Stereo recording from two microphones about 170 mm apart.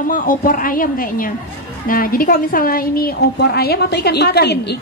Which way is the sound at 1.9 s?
55° left (ahead or behind).